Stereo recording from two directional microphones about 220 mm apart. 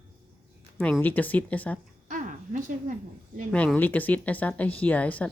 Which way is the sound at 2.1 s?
35° right (ahead or behind).